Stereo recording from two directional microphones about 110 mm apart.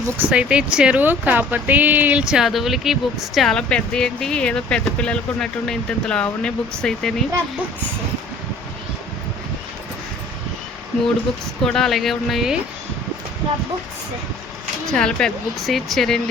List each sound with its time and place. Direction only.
0.2 s speech: 10° right (ahead or behind); by 7.3 s 5° left (ahead or behind)
11.6 s speech: 5° left (ahead or behind)
14.8 s speech: 5° left (ahead or behind)